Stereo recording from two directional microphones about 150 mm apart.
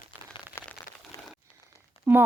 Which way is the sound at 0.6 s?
15° left (ahead or behind).